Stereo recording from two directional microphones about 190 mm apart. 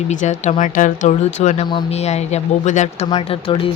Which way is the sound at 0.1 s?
40° left (ahead or behind).